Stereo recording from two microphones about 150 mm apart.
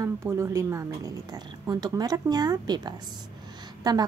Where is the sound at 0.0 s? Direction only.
15° right (ahead or behind).